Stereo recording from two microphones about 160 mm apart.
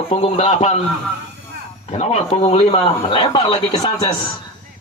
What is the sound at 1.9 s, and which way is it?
Speech, 40° left (ahead or behind).